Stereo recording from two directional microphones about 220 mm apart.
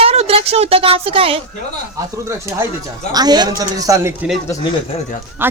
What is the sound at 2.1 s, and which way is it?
A man's voice, 15° right (ahead or behind).